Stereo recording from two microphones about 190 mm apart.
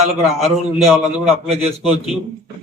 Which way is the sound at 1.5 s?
35° right (ahead or behind).